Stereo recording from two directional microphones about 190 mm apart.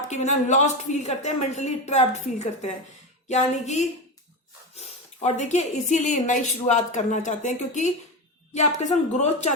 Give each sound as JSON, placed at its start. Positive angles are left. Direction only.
{"t": 0.1, "sound": "speech", "side_deg": 40}